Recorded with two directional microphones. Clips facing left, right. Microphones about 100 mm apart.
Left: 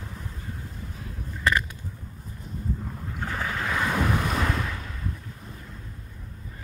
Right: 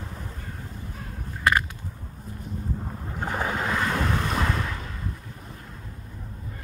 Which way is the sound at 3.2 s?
30° right (ahead or behind).